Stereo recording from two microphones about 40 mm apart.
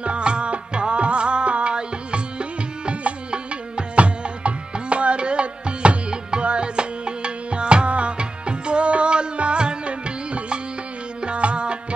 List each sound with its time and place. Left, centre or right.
0.0 s music: right